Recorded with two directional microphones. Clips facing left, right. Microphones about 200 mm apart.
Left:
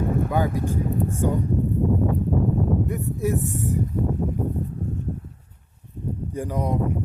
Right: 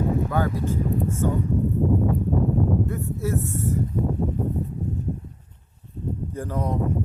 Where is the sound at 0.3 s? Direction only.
15° left (ahead or behind).